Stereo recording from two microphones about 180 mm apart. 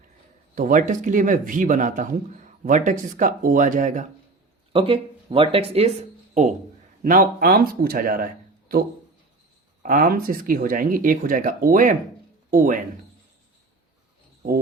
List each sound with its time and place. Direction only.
0.5 s speech: 45° right (ahead or behind)
4.7 s speech: 30° right (ahead or behind)
7.0 s speech: 50° right (ahead or behind)
9.8 s speech: 50° right (ahead or behind)